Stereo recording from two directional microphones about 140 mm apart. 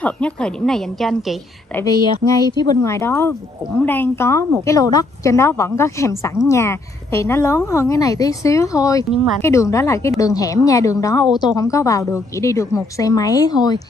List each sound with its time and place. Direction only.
0.0 s a woman's voice: 5° left (ahead or behind)
1.8 s a woman's voice: 25° left (ahead or behind)